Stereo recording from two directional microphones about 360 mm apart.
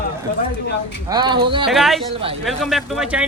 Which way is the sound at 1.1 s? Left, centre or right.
Centre.